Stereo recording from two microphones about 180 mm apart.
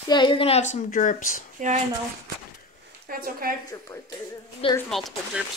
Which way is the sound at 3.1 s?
55° right (ahead or behind).